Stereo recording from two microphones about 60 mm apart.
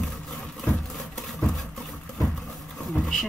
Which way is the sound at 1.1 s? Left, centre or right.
Centre.